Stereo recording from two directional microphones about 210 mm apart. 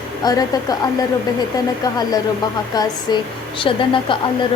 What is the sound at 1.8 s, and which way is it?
A woman's voice, 20° left (ahead or behind).